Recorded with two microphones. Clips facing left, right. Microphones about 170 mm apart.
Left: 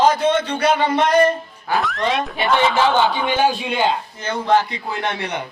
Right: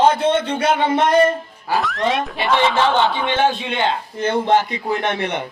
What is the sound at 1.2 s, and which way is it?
Music, centre (ahead or behind).